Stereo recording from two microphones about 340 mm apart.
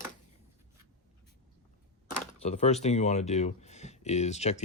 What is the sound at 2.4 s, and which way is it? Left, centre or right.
Speech, centre.